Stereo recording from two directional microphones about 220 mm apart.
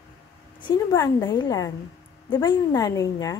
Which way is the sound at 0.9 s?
15° left (ahead or behind).